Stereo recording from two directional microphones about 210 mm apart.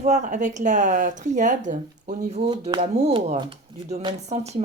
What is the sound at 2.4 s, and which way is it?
Speech, 20° right (ahead or behind).